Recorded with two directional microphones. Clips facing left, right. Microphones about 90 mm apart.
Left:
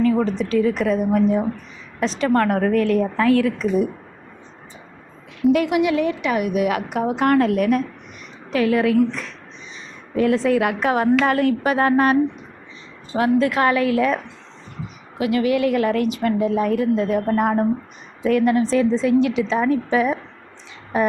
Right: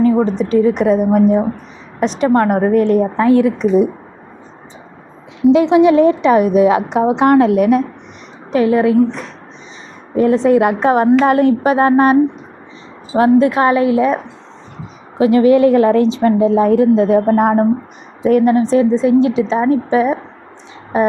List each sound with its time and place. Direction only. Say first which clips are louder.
0.0 s a woman's voice: right 6 dB; 25° right (ahead or behind)
5.4 s a woman's voice: right 8 dB; 20° right (ahead or behind)